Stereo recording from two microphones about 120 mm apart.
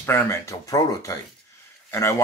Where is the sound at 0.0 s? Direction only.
20° left (ahead or behind).